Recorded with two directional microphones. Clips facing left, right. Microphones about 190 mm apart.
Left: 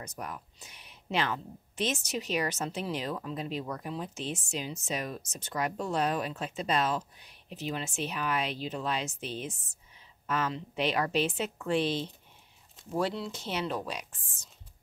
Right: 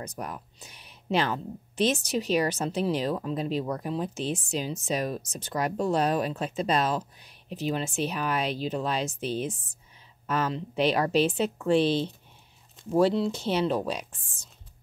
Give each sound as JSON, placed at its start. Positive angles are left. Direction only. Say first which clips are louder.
{"t": 0.0, "sound": "speech", "louder": "right 4 dB", "side_deg": -35}